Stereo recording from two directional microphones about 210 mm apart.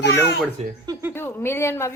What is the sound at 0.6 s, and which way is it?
Speech, 30° right (ahead or behind).